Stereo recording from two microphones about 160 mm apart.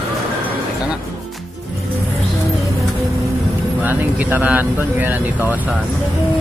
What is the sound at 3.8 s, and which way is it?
Speech, 10° right (ahead or behind).